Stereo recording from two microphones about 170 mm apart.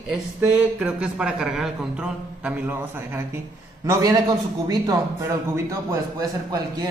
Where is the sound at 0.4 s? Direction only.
5° right (ahead or behind).